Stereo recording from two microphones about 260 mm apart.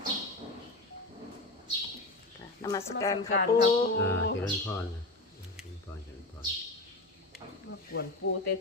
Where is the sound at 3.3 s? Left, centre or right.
Left.